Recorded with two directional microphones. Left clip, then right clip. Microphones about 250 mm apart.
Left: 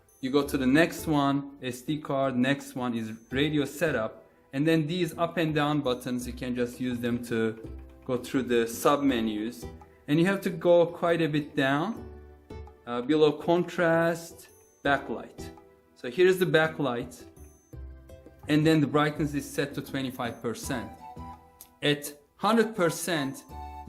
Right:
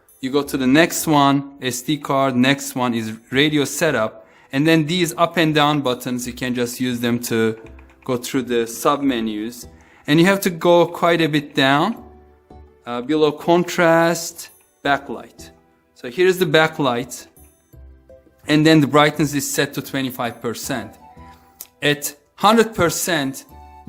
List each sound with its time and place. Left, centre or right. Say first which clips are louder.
0.2 s speech: right 6 dB; right
18.4 s speech: right 10 dB; right